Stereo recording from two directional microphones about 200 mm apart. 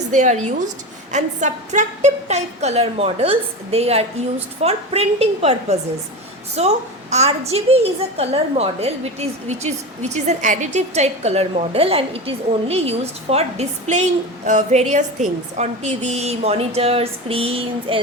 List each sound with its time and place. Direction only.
0.1 s a woman's voice: 35° right (ahead or behind)